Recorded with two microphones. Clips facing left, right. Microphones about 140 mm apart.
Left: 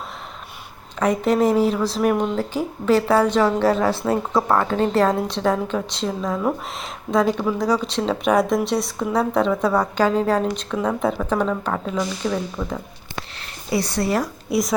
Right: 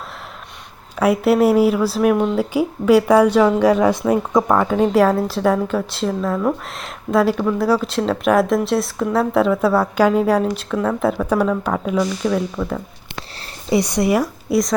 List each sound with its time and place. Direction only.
0.9 s a woman's voice: 10° right (ahead or behind)
13.7 s speech: 15° right (ahead or behind)
14.5 s a woman's voice: centre (ahead or behind)